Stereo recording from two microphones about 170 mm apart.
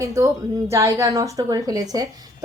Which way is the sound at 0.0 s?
20° right (ahead or behind).